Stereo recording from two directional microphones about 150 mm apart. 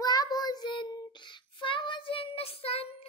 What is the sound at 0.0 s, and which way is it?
Child singing, 25° left (ahead or behind).